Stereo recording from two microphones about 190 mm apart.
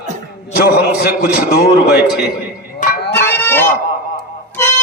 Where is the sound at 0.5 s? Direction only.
50° left (ahead or behind).